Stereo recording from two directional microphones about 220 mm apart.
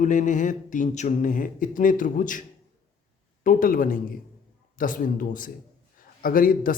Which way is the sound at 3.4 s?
40° left (ahead or behind).